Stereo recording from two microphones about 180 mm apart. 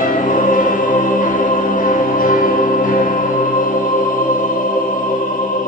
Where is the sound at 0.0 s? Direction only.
45° left (ahead or behind).